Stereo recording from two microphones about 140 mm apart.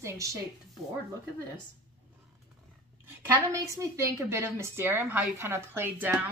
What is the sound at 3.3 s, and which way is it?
A woman's voice, 20° right (ahead or behind).